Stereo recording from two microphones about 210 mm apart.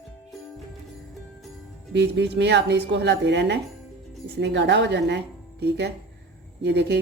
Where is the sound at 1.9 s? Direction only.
55° right (ahead or behind).